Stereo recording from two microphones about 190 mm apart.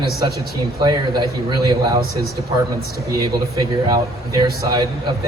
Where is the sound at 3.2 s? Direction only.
20° right (ahead or behind).